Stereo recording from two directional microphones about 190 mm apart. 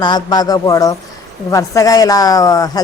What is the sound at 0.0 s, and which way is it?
A woman's voice, 20° left (ahead or behind).